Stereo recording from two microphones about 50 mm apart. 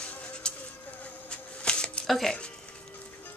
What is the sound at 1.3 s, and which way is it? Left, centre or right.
Shuffling cards, left.